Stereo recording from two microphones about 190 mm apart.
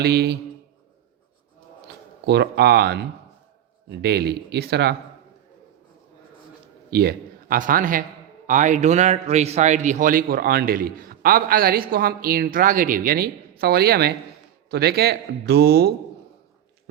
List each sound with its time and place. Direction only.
0.0 s speech: 60° right (ahead or behind)
2.2 s speech: 60° right (ahead or behind)
6.9 s a man's voice: 55° right (ahead or behind)